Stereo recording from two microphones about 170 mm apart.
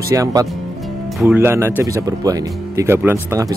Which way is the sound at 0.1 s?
20° right (ahead or behind).